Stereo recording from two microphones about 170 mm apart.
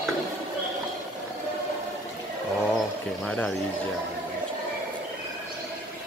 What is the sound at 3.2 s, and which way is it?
Speech, 5° left (ahead or behind).